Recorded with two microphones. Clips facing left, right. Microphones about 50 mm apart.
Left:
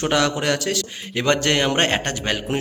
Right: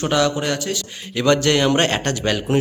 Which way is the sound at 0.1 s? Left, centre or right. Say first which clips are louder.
Right 1 dB; left.